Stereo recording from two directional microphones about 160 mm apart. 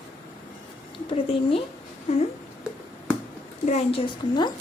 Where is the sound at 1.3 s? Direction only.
35° left (ahead or behind).